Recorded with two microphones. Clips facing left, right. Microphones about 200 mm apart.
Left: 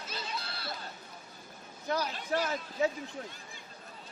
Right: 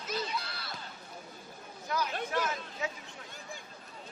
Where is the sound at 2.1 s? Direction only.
55° right (ahead or behind).